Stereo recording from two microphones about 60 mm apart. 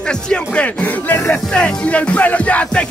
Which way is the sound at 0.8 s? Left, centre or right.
Left.